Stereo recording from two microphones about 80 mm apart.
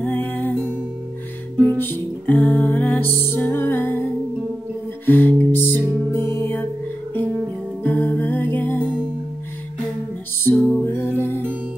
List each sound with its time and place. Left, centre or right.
0.0 s music: left
1.6 s music: left
5.0 s music: left
7.8 s music: left
10.6 s music: left